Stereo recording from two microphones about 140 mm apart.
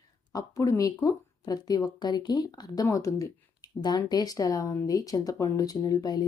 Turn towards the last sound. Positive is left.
turn(degrees=30)  # may be behind; listen again after turning